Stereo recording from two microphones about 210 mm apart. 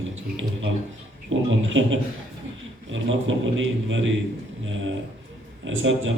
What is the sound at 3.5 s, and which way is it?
Speech, 65° right (ahead or behind).